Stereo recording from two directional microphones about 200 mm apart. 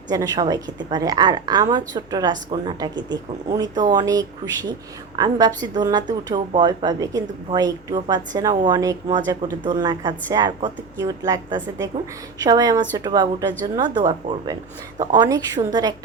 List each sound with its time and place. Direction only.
0.1 s a woman's voice: 20° right (ahead or behind)